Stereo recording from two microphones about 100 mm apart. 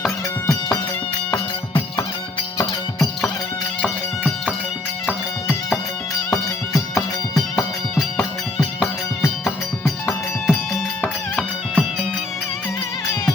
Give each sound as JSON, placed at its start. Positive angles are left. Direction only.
{"t": 0.4, "sound": "music", "side_deg": 30}
{"t": 3.8, "sound": "music", "side_deg": 5}
{"t": 6.3, "sound": "music", "side_deg": 30}
{"t": 9.8, "sound": "music", "side_deg": 20}
{"t": 11.3, "sound": "music", "side_deg": 0}